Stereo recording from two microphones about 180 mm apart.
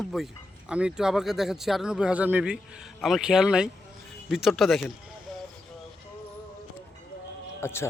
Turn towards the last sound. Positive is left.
turn(degrees=15)  # may be behind; listen again after turning